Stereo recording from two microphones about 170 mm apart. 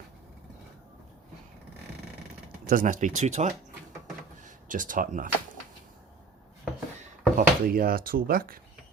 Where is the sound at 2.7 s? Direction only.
55° right (ahead or behind).